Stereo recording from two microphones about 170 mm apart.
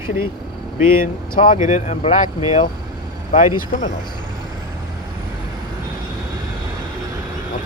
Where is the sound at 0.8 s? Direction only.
55° left (ahead or behind).